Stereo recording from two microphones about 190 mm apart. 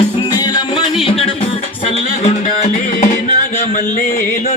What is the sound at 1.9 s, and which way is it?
Music, 35° left (ahead or behind).